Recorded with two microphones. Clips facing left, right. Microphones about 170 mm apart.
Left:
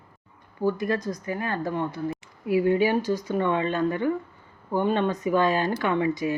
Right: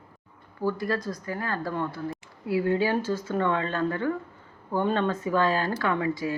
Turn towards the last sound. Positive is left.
turn(degrees=20)  # may be behind; listen again after turning